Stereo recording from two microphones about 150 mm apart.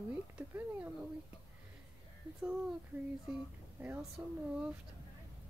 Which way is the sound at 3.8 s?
15° right (ahead or behind).